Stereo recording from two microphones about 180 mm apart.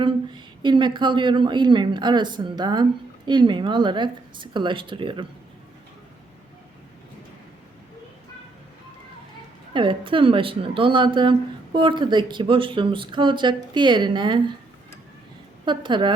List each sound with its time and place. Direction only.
0.0 s a woman's voice: 25° right (ahead or behind)
9.7 s a woman's voice: 30° right (ahead or behind)
15.6 s a woman's voice: 25° right (ahead or behind)